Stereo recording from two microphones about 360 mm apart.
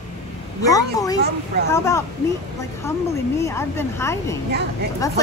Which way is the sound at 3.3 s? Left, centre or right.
Centre.